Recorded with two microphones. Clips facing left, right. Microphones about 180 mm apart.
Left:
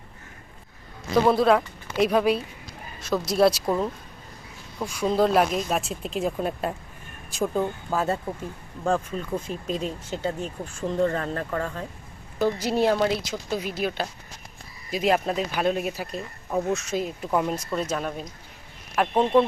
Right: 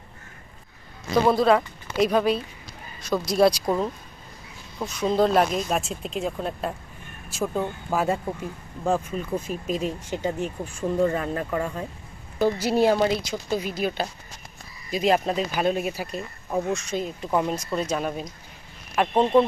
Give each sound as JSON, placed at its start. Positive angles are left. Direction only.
{"t": 1.1, "sound": "speech", "side_deg": 5}
{"t": 7.9, "sound": "speech", "side_deg": -10}